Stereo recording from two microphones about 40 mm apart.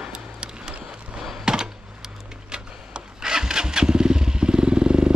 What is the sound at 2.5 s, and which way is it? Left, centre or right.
Engine starting, centre.